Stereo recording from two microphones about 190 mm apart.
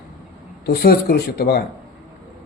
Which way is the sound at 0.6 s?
55° left (ahead or behind).